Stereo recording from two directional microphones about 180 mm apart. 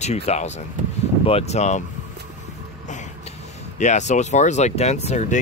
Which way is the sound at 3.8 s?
40° left (ahead or behind).